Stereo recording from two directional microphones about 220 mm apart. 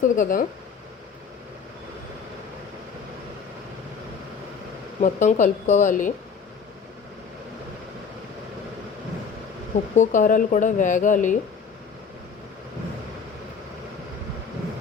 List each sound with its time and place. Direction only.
0.0 s speech: 40° left (ahead or behind)
4.9 s speech: 35° left (ahead or behind)
9.9 s speech: 35° left (ahead or behind)